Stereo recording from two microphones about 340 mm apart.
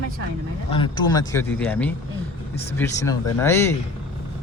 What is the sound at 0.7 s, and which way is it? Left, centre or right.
Speech, centre.